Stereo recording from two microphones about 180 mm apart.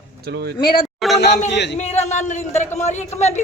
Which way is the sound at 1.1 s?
70° left (ahead or behind).